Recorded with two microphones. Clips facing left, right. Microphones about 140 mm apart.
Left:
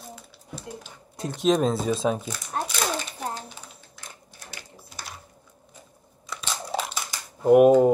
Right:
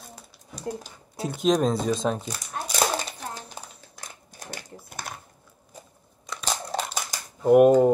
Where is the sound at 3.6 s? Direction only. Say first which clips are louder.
Right 4 dB; 40° right (ahead or behind).